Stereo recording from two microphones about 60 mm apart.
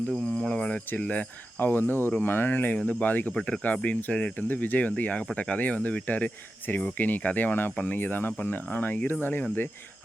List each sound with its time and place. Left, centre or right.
0.3 s speech: left
3.3 s speech: centre; by 9.1 s left